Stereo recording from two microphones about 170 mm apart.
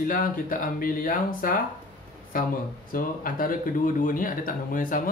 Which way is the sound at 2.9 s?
55° left (ahead or behind).